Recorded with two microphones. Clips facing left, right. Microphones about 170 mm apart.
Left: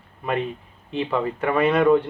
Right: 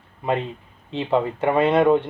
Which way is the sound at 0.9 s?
25° right (ahead or behind).